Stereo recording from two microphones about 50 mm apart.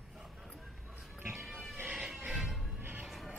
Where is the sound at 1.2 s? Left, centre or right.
Right.